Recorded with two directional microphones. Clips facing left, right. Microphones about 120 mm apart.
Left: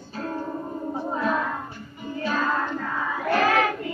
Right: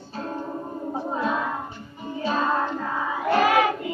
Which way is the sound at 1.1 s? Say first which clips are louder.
Left 1 dB; 20° right (ahead or behind).